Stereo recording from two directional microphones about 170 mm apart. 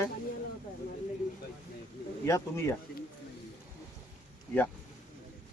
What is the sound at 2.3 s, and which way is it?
Speech, 15° left (ahead or behind).